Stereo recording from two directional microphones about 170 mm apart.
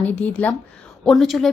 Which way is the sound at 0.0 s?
10° left (ahead or behind).